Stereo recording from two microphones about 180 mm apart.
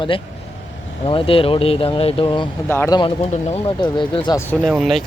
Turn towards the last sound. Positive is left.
turn(degrees=0)  # may be behind; listen again after turning